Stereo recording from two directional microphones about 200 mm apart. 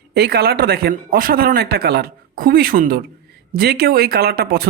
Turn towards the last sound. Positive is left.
turn(degrees=-50)  # may be behind; listen again after turning